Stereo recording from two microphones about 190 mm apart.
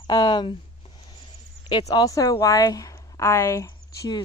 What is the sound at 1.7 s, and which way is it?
A woman's voice, 20° left (ahead or behind).